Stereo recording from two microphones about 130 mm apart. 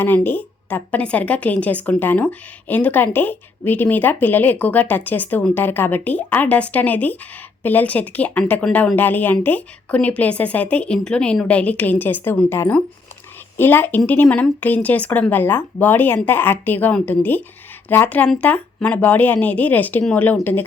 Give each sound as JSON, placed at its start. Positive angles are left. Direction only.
{"t": 0.0, "sound": "speech", "side_deg": 15}